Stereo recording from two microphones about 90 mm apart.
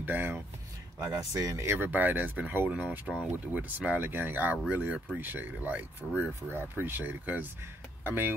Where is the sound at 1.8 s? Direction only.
20° right (ahead or behind).